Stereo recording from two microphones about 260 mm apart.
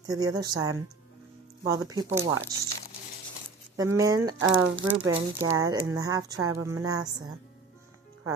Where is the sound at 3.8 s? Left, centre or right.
Centre.